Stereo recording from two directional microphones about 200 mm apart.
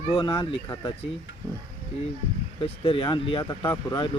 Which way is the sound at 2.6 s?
30° left (ahead or behind).